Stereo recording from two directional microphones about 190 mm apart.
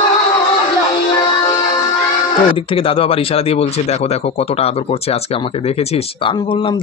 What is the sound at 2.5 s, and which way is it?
Speech, 30° left (ahead or behind).